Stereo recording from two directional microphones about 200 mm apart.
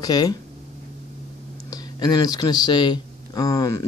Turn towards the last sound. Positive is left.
turn(degrees=15)  # may be behind; listen again after turning